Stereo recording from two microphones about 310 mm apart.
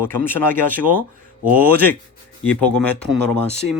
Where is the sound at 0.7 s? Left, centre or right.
Right.